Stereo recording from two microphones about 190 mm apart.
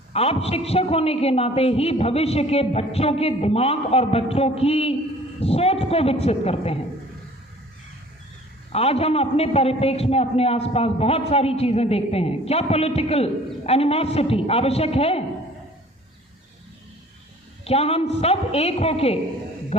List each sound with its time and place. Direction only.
0.1 s a man's voice: 30° left (ahead or behind)
8.7 s a man's voice: 30° left (ahead or behind)
17.7 s a man's voice: 30° left (ahead or behind)